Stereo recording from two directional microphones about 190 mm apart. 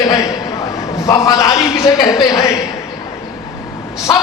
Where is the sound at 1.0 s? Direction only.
20° left (ahead or behind).